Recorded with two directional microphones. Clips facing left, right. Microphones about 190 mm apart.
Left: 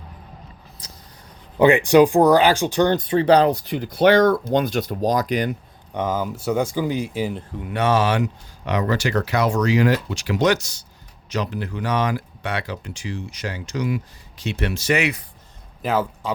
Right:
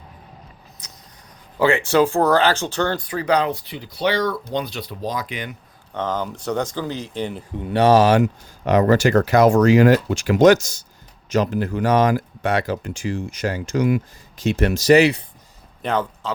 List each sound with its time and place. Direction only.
0.8 s a sound: 30° left (ahead or behind)
1.5 s speech: 20° left (ahead or behind); by 5.5 s 40° left (ahead or behind)
5.9 s speech: 10° left (ahead or behind)
7.6 s speech: 35° right (ahead or behind)
15.8 s speech: 5° left (ahead or behind)